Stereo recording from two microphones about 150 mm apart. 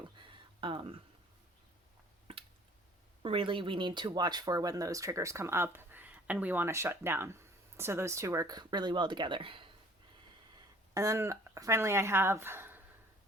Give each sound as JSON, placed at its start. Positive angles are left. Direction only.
{"t": 0.0, "sound": "a sound", "side_deg": -35}
{"t": 3.2, "sound": "speech", "side_deg": -35}
{"t": 10.9, "sound": "speech", "side_deg": -20}